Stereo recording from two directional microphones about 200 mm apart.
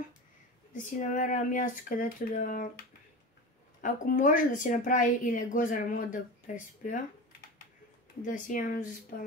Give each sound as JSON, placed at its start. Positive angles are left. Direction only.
{"t": 0.9, "sound": "speech", "side_deg": 40}
{"t": 3.8, "sound": "speech", "side_deg": 40}
{"t": 8.2, "sound": "speech", "side_deg": 45}